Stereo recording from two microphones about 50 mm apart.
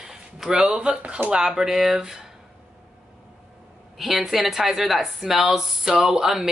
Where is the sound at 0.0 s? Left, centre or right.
Centre.